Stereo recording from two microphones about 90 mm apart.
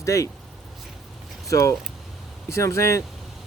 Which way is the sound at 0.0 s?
35° left (ahead or behind).